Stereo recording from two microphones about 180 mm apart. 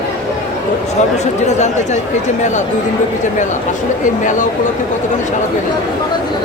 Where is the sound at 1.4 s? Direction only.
40° left (ahead or behind).